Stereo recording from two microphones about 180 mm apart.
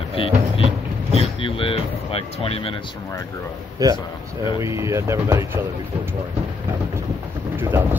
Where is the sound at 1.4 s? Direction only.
30° left (ahead or behind).